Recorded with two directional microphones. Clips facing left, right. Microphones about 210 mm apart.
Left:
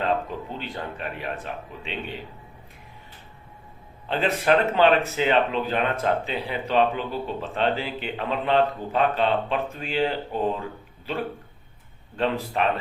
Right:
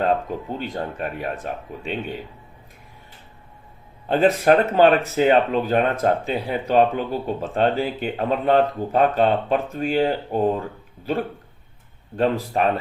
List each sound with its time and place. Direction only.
0.0 s speech: 45° right (ahead or behind)
4.1 s speech: 45° right (ahead or behind)
12.1 s speech: 45° right (ahead or behind)